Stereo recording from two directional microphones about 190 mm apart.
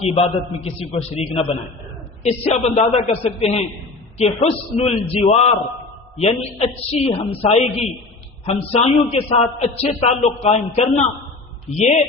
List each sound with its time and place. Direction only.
0.6 s a man's voice: 30° left (ahead or behind)